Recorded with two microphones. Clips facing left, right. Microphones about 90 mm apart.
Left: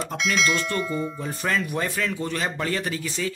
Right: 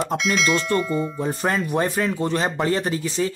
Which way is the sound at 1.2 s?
30° right (ahead or behind).